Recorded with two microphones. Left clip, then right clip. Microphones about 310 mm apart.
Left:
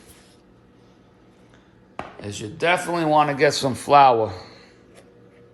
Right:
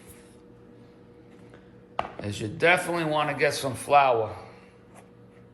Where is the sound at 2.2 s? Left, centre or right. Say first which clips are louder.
Left 1 dB; centre; by 4.3 s left.